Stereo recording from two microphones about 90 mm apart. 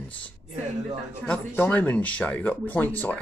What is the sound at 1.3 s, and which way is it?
Speech, 15° left (ahead or behind).